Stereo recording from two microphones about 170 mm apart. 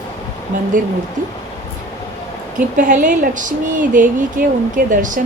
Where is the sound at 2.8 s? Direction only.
50° right (ahead or behind).